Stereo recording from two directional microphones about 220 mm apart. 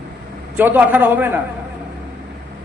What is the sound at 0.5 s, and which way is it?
Speech, 10° right (ahead or behind).